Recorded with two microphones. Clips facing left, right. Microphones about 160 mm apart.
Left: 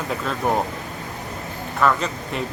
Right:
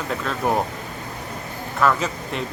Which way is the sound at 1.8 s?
Centre (ahead or behind).